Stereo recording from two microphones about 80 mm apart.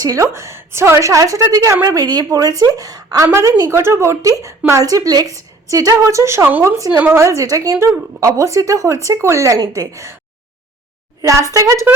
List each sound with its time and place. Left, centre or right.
0.0 s speech: right
2.0 s a woman's voice: right
3.6 s a woman's voice: right
6.9 s speech: right
7.2 s speech: right
11.2 s a woman's voice: right